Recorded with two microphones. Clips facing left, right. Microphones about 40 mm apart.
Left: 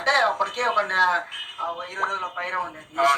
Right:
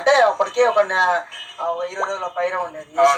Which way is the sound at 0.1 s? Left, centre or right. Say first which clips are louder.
Right 6 dB; centre.